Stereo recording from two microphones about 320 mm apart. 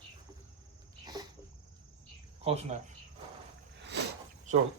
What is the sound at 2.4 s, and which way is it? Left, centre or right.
Speech, centre.